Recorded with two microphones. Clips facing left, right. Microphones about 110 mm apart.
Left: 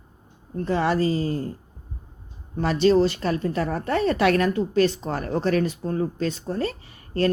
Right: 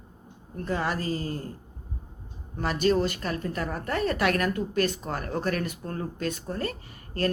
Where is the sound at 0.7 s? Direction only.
30° left (ahead or behind).